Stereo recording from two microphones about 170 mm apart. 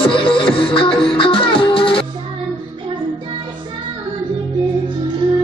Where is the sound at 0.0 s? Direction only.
30° left (ahead or behind).